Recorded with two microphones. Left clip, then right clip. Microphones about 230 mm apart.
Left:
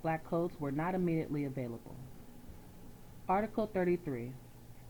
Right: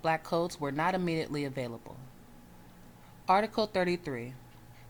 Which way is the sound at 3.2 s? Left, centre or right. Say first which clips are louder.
Right 6 dB; right.